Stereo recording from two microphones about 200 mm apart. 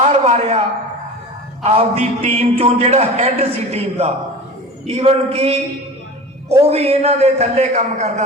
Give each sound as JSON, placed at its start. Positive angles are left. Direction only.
{"t": 0.0, "sound": "a sound", "side_deg": -30}
{"t": 1.6, "sound": "a man's voice", "side_deg": -30}
{"t": 6.6, "sound": "a man's voice", "side_deg": -30}